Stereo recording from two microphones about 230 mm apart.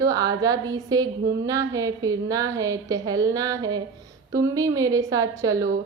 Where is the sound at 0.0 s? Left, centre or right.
Centre.